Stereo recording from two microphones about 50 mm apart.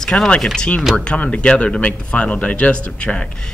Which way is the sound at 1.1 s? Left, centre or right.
Left.